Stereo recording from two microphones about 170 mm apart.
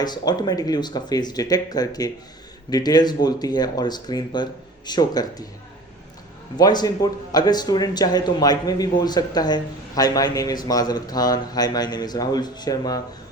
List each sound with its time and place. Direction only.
0.0 s a man's voice: 25° left (ahead or behind)
6.6 s a man's voice: 25° left (ahead or behind)